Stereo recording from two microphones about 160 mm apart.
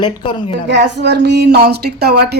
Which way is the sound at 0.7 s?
90° right.